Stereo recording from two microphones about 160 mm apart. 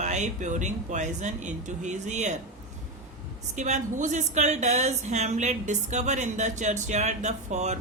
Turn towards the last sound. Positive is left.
turn(degrees=-45)  # may be behind; listen again after turning